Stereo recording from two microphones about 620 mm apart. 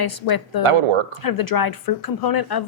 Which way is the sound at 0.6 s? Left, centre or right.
Right.